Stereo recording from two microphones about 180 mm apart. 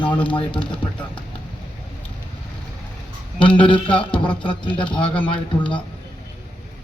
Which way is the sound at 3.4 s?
30° left (ahead or behind).